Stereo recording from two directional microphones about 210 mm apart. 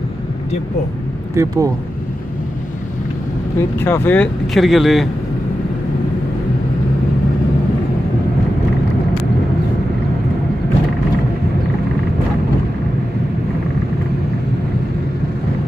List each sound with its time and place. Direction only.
1.3 s speech: 15° right (ahead or behind)
3.8 s speech: 10° left (ahead or behind)